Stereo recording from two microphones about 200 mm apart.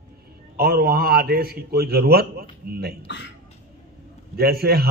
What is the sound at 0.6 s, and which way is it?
A man's voice, 50° right (ahead or behind).